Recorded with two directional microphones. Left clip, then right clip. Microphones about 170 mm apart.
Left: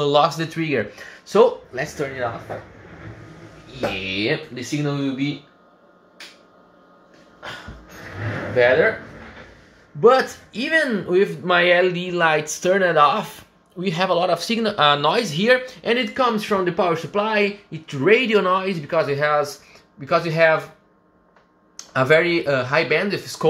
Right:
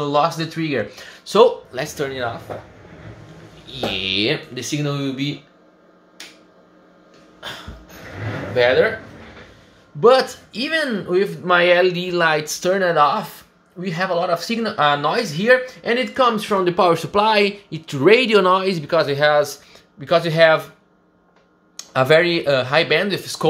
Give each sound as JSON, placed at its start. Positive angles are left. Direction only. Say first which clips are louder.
{"t": 0.0, "sound": "speech", "louder": "left 1 dB", "side_deg": 5}
{"t": 1.3, "sound": "speech", "louder": "right 2 dB", "side_deg": -10}
{"t": 4.1, "sound": "speech", "louder": "right 3 dB", "side_deg": -15}
{"t": 9.9, "sound": "speech", "louder": "right 1 dB", "side_deg": -10}
{"t": 10.8, "sound": "speech", "louder": "left 1 dB", "side_deg": 0}
{"t": 16.1, "sound": "speech", "louder": "right 3 dB", "side_deg": -15}
{"t": 21.9, "sound": "speech", "louder": "right 2 dB", "side_deg": -10}